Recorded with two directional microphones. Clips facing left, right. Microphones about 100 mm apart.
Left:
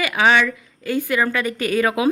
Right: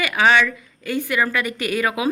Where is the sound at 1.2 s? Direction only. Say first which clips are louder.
Left 1 dB; 25° left (ahead or behind).